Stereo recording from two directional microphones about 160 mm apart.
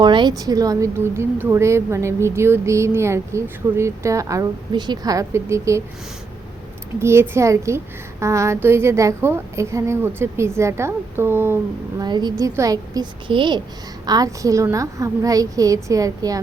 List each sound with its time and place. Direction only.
0.0 s a woman's voice: 30° right (ahead or behind)
7.0 s a woman's voice: 15° right (ahead or behind)
12.0 s a woman's voice: 25° right (ahead or behind)